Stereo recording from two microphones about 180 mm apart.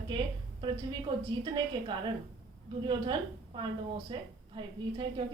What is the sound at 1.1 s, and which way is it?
Speech, 25° right (ahead or behind).